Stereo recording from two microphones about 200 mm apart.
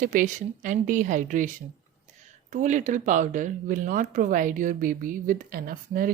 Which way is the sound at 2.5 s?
40° right (ahead or behind).